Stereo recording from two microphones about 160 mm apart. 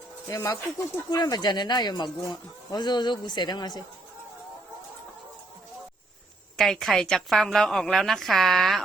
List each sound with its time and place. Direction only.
0.3 s speech: 20° left (ahead or behind)
6.6 s a woman's voice: centre (ahead or behind)